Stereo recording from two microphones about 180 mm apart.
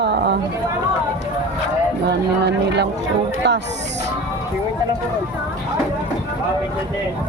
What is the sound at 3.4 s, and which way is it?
Speech, 75° right (ahead or behind).